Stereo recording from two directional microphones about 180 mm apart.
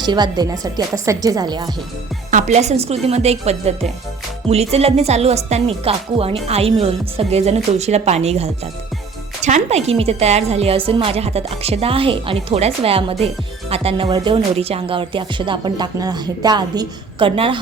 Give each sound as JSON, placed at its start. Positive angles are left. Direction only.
{"t": 0.0, "sound": "music", "side_deg": -25}
{"t": 2.3, "sound": "a woman's voice", "side_deg": -40}
{"t": 14.1, "sound": "music", "side_deg": -30}